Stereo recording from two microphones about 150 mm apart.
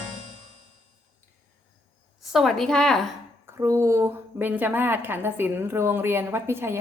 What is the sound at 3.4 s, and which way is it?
A woman's voice, 20° right (ahead or behind).